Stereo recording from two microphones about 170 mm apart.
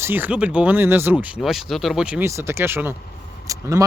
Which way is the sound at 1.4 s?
Centre (ahead or behind).